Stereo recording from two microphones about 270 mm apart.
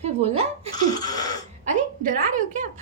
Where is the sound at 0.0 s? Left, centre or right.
Right.